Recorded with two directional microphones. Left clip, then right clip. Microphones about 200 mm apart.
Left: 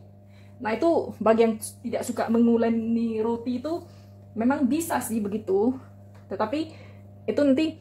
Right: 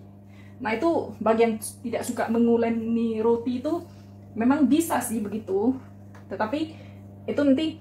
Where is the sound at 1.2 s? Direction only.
55° left (ahead or behind).